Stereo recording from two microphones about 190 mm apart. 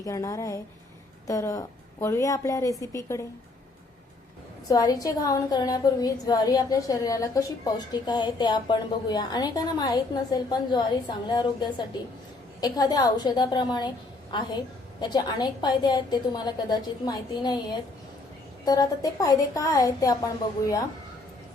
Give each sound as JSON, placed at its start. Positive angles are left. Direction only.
{"t": 0.0, "sound": "a woman's voice", "side_deg": 15}
{"t": 4.7, "sound": "a woman's voice", "side_deg": 20}
{"t": 18.6, "sound": "a woman's voice", "side_deg": 20}